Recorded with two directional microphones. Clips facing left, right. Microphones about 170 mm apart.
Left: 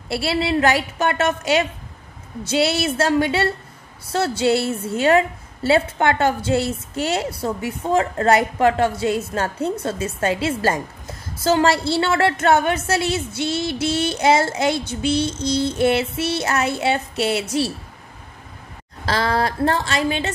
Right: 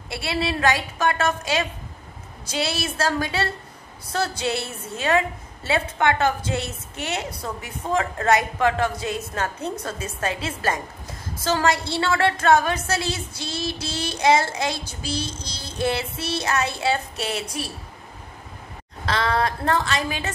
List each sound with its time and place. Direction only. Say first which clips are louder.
0.1 s a woman's voice: left 5 dB; 30° left (ahead or behind)
19.0 s a woman's voice: left 2 dB; 35° left (ahead or behind)